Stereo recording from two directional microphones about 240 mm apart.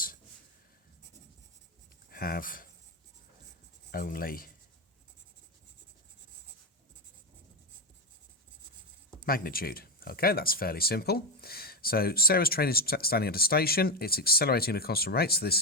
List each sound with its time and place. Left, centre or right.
2.0 s speech: left
3.9 s speech: left
9.2 s speech: left